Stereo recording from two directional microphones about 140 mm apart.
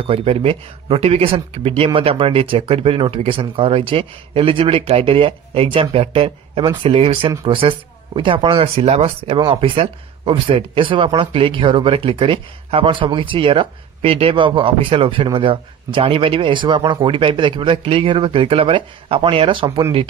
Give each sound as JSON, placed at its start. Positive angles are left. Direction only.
{"t": 0.0, "sound": "speech", "side_deg": -40}